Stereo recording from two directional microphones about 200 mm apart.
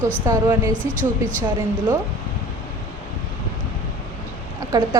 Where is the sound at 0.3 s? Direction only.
15° right (ahead or behind).